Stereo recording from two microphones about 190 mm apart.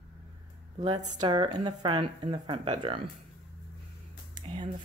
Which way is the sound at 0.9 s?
25° right (ahead or behind).